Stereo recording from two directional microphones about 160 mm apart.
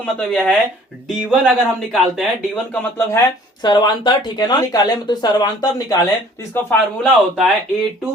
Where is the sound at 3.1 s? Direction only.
20° left (ahead or behind).